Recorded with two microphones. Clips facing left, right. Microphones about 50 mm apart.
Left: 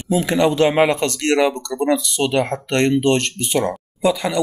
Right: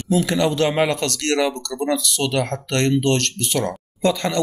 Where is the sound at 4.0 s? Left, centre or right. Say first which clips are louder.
Left 1 dB; centre.